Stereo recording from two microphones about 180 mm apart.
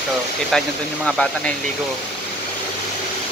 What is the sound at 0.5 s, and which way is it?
Speech, centre (ahead or behind).